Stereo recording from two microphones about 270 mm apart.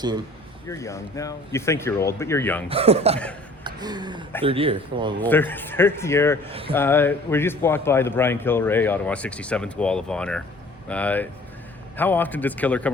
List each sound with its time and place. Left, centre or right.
0.7 s a man's voice: centre
2.6 s speech: right
3.6 s a sound: centre
4.4 s speech: right
5.2 s a man's voice: centre
6.5 s speech: right
6.7 s a man's voice: centre